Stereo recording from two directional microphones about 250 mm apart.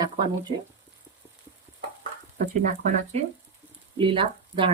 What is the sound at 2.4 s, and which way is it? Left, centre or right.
Speech, right.